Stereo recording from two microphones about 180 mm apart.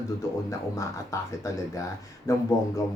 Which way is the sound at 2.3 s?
15° left (ahead or behind).